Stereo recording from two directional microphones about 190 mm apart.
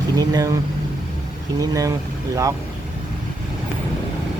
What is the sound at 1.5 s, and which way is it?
Speech, 20° right (ahead or behind).